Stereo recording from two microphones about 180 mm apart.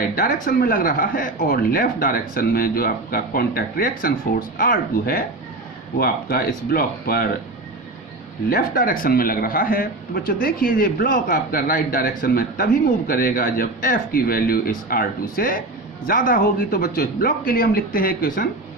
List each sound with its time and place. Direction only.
0.2 s speech: 50° left (ahead or behind)
8.4 s speech: 50° left (ahead or behind)